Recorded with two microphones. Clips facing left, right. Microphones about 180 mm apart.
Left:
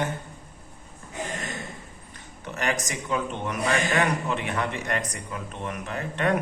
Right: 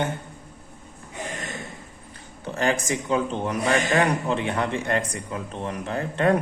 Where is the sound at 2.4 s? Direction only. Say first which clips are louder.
Right 4 dB; 30° right (ahead or behind).